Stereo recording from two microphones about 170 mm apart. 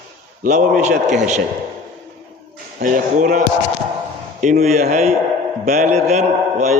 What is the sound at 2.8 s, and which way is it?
Speech, 50° right (ahead or behind).